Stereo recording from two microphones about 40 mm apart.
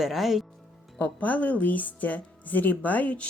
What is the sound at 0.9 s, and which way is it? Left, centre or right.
A woman's voice, left.